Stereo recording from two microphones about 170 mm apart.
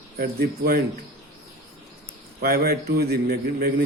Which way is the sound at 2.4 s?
60° right (ahead or behind).